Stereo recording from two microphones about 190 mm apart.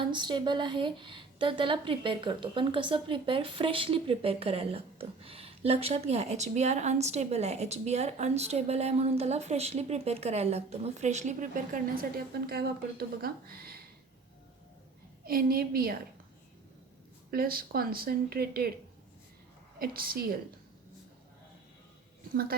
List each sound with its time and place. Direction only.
0.0 s a woman's voice: 25° right (ahead or behind); by 13.7 s 50° right (ahead or behind)
15.2 s speech: 50° right (ahead or behind)
17.3 s speech: 50° right (ahead or behind)
19.8 s speech: 50° right (ahead or behind)